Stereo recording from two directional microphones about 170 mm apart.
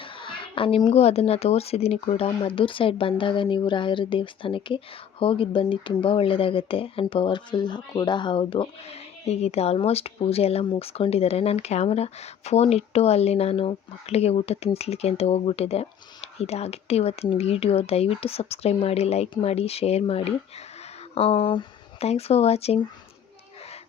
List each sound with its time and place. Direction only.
0.0 s speech: 30° left (ahead or behind)